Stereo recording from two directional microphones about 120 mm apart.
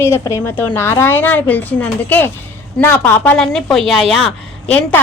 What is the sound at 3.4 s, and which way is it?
Speech, 5° left (ahead or behind).